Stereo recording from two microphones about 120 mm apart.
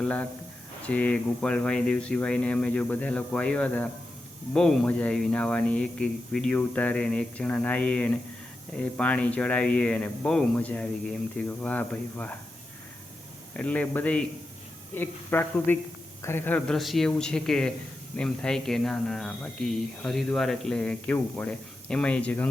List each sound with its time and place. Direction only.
0.0 s speech: 10° left (ahead or behind)
13.6 s speech: 10° left (ahead or behind)